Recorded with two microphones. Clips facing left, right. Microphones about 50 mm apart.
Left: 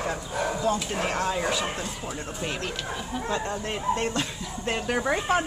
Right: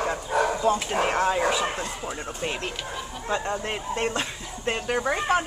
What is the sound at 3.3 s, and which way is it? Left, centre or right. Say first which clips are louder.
Speech: right 3 dB; right.